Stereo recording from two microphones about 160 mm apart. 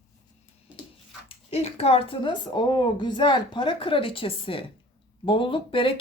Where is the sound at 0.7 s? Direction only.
10° right (ahead or behind).